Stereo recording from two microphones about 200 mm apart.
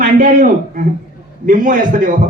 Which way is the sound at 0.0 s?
40° right (ahead or behind).